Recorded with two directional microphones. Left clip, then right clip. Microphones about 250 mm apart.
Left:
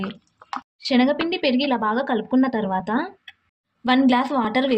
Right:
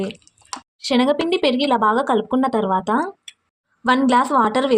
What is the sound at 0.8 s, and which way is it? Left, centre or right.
Speech, centre.